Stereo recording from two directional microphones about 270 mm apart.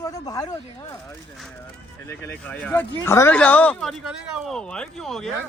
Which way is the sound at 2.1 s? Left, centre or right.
Centre.